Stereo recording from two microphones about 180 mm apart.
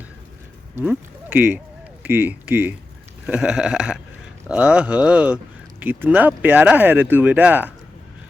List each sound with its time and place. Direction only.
0.8 s speech: 10° right (ahead or behind)
3.2 s a sound: 5° right (ahead or behind)
4.4 s speech: 5° right (ahead or behind)